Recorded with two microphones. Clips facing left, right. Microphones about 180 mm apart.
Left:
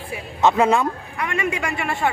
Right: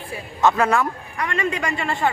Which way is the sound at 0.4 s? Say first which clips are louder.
Left 1 dB; 20° left (ahead or behind).